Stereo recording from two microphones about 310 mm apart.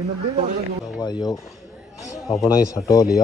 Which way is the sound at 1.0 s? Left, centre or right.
Centre.